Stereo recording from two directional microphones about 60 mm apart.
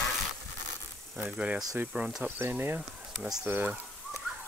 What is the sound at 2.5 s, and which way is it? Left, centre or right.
Speech, right.